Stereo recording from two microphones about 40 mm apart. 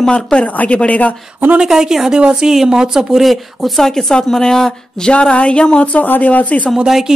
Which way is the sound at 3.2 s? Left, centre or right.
Centre.